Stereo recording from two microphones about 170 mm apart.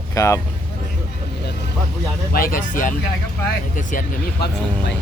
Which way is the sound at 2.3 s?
55° left (ahead or behind).